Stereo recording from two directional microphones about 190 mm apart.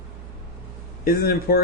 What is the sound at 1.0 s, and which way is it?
Speech, 50° left (ahead or behind).